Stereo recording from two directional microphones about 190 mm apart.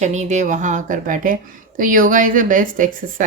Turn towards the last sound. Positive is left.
turn(degrees=-45)  # may be behind; listen again after turning